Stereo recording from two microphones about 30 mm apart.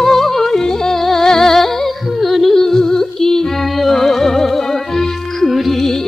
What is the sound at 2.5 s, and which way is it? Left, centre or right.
Music, centre.